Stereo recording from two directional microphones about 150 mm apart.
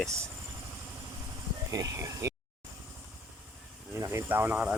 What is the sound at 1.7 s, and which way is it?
Speech, 20° right (ahead or behind).